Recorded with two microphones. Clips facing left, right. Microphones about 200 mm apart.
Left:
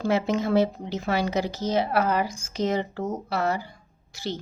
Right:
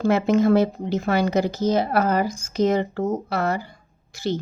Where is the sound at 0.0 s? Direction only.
50° right (ahead or behind).